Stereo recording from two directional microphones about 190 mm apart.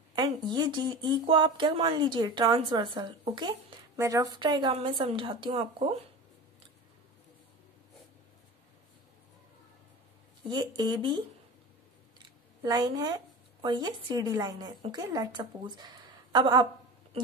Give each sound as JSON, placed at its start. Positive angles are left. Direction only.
{"t": 0.1, "sound": "speech", "side_deg": -25}
{"t": 10.5, "sound": "speech", "side_deg": -20}
{"t": 12.6, "sound": "speech", "side_deg": -20}